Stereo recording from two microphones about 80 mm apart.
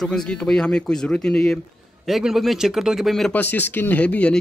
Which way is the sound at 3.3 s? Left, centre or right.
Left.